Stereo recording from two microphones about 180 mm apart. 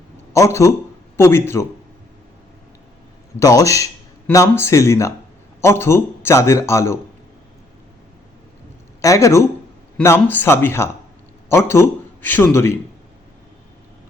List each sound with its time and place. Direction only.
0.3 s a man's voice: 15° left (ahead or behind)
3.4 s a man's voice: 20° left (ahead or behind)
9.0 s a man's voice: 15° left (ahead or behind)